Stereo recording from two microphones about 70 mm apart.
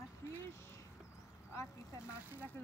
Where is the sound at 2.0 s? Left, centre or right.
Right.